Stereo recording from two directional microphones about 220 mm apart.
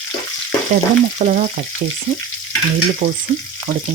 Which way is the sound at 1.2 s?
35° right (ahead or behind).